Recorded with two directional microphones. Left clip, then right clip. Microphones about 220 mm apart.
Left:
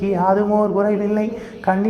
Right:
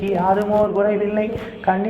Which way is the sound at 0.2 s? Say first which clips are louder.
Even; 50° left (ahead or behind).